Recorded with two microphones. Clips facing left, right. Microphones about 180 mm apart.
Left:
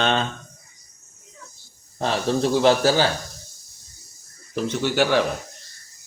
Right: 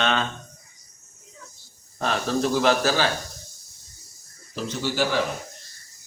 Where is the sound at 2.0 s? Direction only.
30° left (ahead or behind).